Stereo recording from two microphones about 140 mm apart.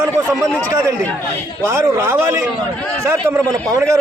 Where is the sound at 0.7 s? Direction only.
20° right (ahead or behind).